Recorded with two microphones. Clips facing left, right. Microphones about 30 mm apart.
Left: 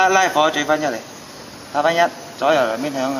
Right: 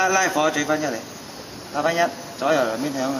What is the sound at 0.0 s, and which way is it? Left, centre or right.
Speech, left.